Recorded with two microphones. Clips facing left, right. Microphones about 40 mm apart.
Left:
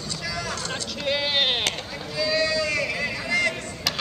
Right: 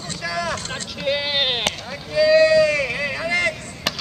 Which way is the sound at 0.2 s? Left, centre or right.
Right.